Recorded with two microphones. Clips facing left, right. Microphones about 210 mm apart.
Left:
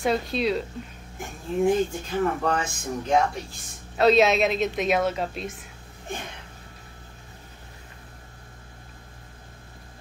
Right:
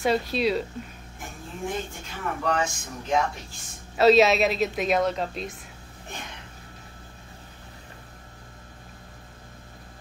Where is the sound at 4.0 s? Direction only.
Centre (ahead or behind).